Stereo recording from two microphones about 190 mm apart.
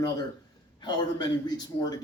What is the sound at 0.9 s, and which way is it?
A man's voice, 20° left (ahead or behind).